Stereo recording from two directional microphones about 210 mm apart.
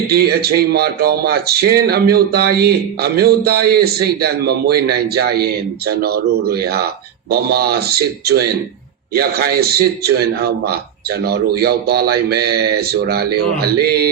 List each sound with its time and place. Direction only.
0.1 s speech: 50° right (ahead or behind)